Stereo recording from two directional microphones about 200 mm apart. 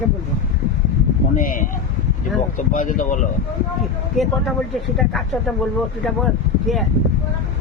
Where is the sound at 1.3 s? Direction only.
45° left (ahead or behind).